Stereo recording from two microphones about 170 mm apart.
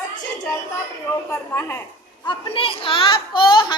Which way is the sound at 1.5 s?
15° left (ahead or behind).